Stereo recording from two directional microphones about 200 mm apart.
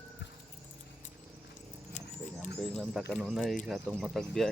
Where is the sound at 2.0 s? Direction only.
35° left (ahead or behind).